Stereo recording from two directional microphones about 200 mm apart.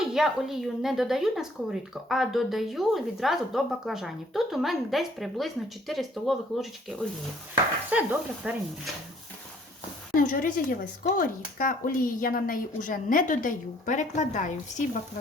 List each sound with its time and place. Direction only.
0.0 s speech: centre (ahead or behind)
10.2 s speech: 45° left (ahead or behind)